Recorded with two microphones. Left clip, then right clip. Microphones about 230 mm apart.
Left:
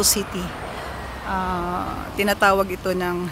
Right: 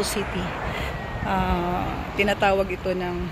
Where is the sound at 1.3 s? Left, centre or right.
Centre.